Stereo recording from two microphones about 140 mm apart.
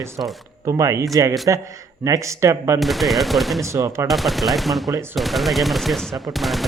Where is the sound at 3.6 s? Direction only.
20° right (ahead or behind).